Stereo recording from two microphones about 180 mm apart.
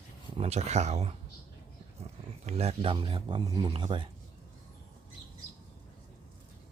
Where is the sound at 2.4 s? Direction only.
35° right (ahead or behind).